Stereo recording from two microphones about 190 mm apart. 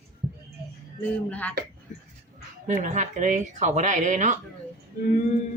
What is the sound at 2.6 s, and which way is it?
Speech, 40° right (ahead or behind).